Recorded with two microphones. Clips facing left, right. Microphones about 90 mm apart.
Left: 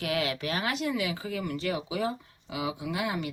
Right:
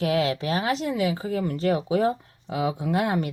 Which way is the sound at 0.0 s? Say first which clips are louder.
Right 6 dB; 30° right (ahead or behind).